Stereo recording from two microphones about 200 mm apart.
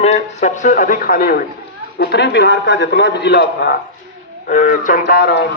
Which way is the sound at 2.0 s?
60° left (ahead or behind).